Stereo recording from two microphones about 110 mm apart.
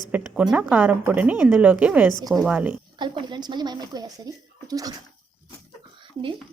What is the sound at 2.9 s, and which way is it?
Speech, 45° right (ahead or behind).